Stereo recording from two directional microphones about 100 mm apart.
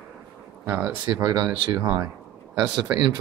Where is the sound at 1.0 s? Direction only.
50° right (ahead or behind).